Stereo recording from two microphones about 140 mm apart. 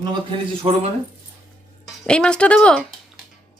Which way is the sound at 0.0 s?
35° right (ahead or behind).